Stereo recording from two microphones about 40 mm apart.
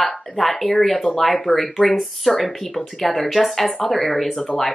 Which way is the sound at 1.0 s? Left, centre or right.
Centre.